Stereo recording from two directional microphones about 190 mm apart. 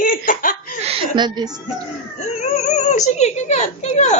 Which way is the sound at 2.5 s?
35° left (ahead or behind).